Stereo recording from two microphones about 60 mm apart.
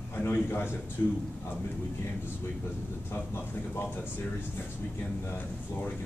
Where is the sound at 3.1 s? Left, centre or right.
Left.